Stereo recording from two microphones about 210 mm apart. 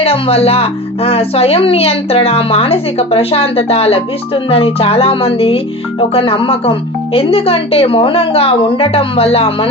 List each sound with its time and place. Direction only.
0.0 s speech: 25° left (ahead or behind)